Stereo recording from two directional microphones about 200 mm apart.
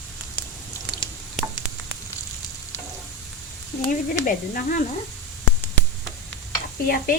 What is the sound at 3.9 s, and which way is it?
Speech, 45° left (ahead or behind).